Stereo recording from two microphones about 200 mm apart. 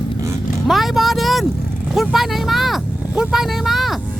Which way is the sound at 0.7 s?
Centre (ahead or behind).